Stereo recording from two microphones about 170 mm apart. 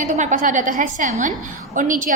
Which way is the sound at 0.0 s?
45° right (ahead or behind).